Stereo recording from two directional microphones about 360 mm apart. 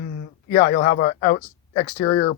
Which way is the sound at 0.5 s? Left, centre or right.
Left.